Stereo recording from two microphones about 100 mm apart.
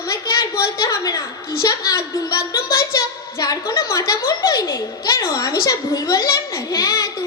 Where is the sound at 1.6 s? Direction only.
40° left (ahead or behind).